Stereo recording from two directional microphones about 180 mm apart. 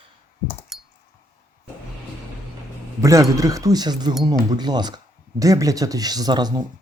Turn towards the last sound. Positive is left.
turn(degrees=-20)  # may be behind; listen again after turning